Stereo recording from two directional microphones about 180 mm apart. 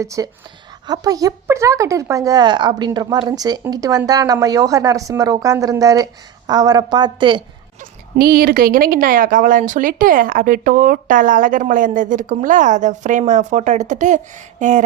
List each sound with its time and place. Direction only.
0.0 s speech: 15° right (ahead or behind)
7.8 s a woman's voice: 55° right (ahead or behind)